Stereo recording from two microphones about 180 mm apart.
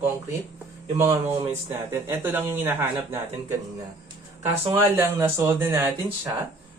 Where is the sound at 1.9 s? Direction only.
10° right (ahead or behind).